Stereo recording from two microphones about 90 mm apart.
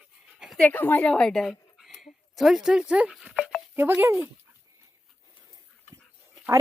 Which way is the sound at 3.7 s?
25° right (ahead or behind).